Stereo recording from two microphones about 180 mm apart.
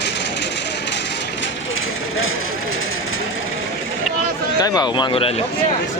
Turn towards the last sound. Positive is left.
turn(degrees=30)  # may be behind; listen again after turning